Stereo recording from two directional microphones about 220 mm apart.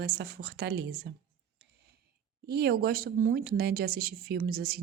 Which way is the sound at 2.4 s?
45° right (ahead or behind).